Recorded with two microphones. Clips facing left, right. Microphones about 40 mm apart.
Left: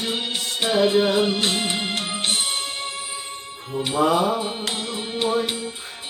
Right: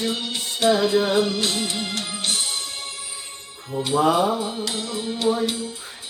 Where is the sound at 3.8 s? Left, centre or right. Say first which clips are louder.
Right 1 dB; left.